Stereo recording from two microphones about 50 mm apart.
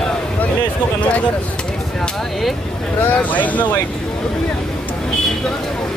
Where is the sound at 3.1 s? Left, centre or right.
Left.